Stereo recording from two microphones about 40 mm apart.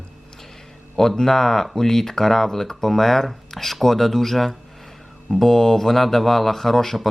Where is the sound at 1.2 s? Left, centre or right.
Centre.